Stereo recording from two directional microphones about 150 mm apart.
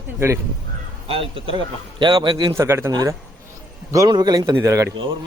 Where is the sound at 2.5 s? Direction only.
15° right (ahead or behind).